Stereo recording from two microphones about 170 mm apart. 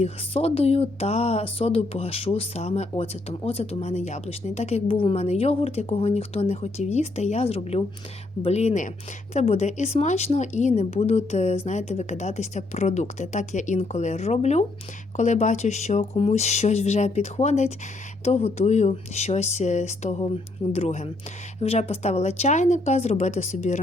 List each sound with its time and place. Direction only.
0.0 s speech: 35° left (ahead or behind)